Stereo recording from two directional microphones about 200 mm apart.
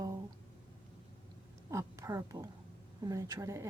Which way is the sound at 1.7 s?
15° right (ahead or behind).